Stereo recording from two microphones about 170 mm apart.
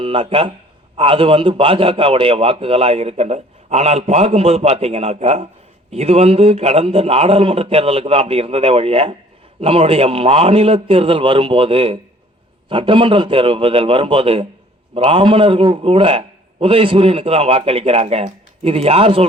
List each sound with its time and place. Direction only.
0.0 s a man's voice: 35° right (ahead or behind)